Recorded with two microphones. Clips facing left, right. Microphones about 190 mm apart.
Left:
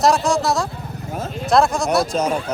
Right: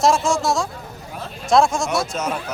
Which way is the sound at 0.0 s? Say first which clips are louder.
Left 1 dB; centre (ahead or behind).